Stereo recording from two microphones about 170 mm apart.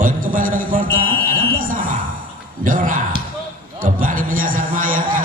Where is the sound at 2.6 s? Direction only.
50° right (ahead or behind).